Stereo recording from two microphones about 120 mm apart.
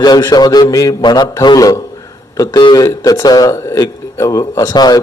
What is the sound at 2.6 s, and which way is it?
Speech, 40° left (ahead or behind).